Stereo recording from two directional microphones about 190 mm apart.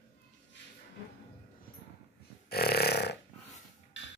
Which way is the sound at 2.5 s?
55° left (ahead or behind).